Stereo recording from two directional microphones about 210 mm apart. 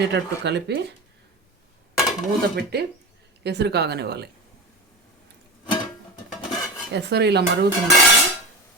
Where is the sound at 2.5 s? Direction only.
50° right (ahead or behind).